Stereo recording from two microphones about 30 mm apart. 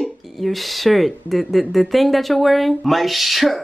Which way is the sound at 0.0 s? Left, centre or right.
Centre.